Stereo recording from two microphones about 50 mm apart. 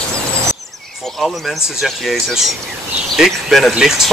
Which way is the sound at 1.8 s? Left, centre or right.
Centre.